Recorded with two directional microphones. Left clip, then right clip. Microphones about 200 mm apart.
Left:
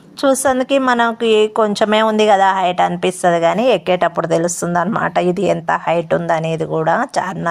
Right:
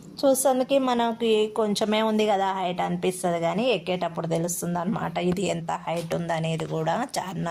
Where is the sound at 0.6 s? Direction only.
25° left (ahead or behind).